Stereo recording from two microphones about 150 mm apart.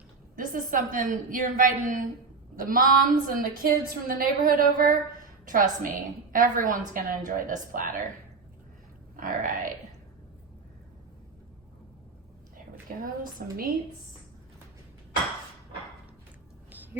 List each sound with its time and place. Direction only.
0.3 s a woman's voice: 65° right (ahead or behind)
9.2 s a woman's voice: 60° right (ahead or behind)
13.0 s a woman's voice: 75° right (ahead or behind)